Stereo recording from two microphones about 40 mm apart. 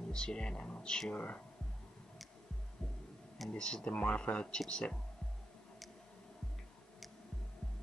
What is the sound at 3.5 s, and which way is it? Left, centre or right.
Speech, left.